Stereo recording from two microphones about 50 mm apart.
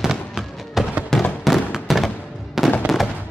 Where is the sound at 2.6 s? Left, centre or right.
Centre.